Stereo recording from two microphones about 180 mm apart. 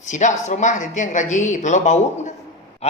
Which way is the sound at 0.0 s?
45° left (ahead or behind).